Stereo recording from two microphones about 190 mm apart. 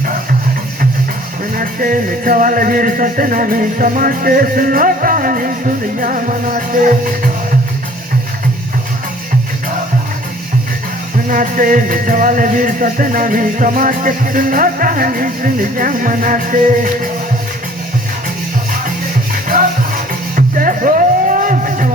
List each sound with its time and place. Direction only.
1.5 s music: 45° right (ahead or behind)
11.3 s music: 45° right (ahead or behind)
19.3 s music: 45° right (ahead or behind)